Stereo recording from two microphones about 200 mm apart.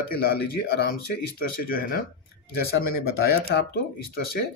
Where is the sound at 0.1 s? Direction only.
50° left (ahead or behind).